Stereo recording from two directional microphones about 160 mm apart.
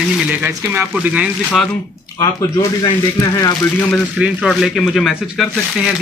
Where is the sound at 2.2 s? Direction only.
20° left (ahead or behind).